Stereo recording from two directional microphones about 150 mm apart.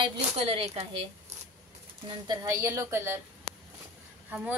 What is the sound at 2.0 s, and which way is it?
A woman's voice, 25° right (ahead or behind).